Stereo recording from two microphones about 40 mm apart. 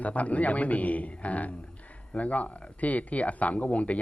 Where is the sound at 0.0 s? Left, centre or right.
Left.